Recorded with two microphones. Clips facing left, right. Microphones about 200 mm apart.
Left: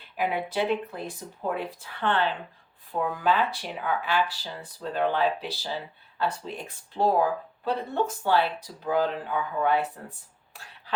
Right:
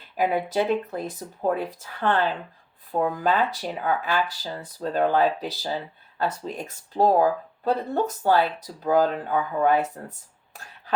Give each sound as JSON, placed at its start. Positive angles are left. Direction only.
{"t": 0.2, "sound": "speech", "side_deg": -40}